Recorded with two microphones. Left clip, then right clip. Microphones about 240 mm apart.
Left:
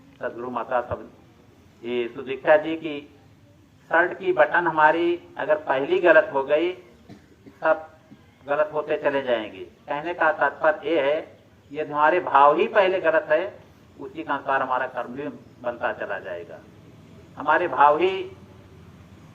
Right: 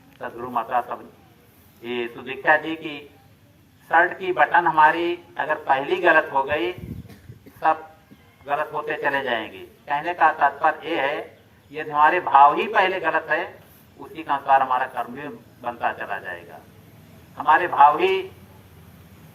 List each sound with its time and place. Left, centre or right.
0.2 s a man's voice: right
8.4 s a man's voice: right